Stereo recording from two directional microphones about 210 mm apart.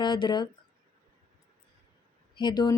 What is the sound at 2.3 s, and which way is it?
Speech, 20° left (ahead or behind).